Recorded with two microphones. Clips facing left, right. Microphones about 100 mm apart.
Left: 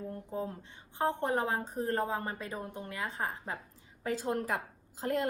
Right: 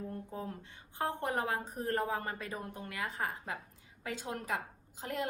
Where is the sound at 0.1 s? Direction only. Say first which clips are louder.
Left 4 dB; 25° left (ahead or behind).